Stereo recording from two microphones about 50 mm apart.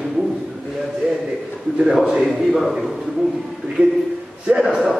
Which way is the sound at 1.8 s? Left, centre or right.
Centre.